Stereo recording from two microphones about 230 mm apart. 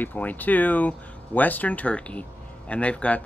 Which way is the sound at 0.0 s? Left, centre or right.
Centre.